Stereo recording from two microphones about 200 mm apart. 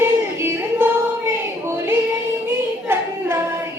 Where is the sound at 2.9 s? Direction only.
10° right (ahead or behind).